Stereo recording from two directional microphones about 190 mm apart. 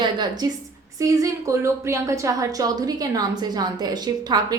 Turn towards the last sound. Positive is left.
turn(degrees=-20)  # may be behind; listen again after turning